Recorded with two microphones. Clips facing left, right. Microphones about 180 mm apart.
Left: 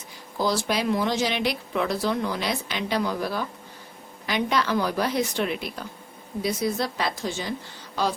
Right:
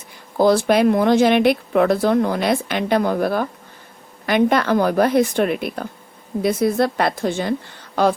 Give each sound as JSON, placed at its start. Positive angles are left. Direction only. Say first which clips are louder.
{"t": 0.3, "sound": "a woman's voice", "louder": "right 10 dB", "side_deg": -55}